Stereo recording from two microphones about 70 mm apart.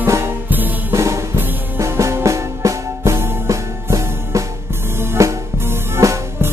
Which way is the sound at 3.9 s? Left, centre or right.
Right.